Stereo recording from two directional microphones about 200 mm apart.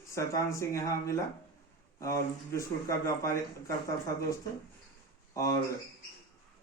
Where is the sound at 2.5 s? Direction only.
15° left (ahead or behind).